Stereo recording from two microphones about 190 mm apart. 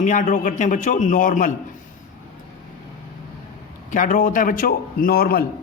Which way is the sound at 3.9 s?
45° left (ahead or behind).